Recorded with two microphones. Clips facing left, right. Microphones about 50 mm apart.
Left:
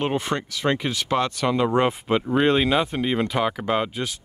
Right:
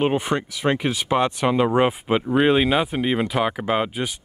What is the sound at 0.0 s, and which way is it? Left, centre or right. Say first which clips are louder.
Speech: right 3 dB; centre.